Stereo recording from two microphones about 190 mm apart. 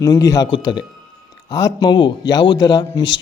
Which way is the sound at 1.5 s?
20° left (ahead or behind).